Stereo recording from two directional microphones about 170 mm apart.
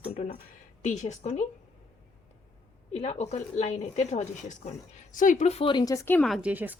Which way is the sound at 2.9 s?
35° left (ahead or behind).